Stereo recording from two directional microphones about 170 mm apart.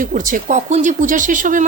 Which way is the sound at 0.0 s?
50° right (ahead or behind).